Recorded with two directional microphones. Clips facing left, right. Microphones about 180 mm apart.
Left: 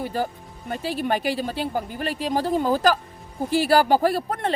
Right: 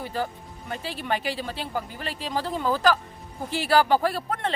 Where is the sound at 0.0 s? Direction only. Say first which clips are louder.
Left 3 dB; 45° left (ahead or behind).